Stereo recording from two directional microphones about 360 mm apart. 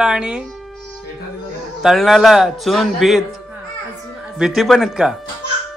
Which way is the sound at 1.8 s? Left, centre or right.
Centre.